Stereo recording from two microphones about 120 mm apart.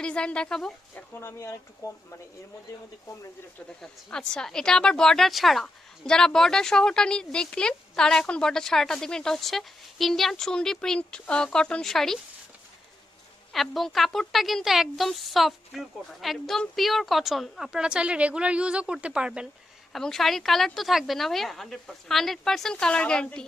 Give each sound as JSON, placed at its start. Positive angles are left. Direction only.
{"t": 0.0, "sound": "speech", "side_deg": 10}
{"t": 1.2, "sound": "speech", "side_deg": 20}
{"t": 3.8, "sound": "a woman's voice", "side_deg": 5}
{"t": 13.5, "sound": "a woman's voice", "side_deg": 0}
{"t": 19.9, "sound": "a woman's voice", "side_deg": 5}